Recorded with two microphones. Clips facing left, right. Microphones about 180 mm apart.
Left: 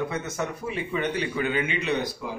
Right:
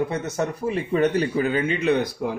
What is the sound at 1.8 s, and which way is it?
Speech, 55° right (ahead or behind).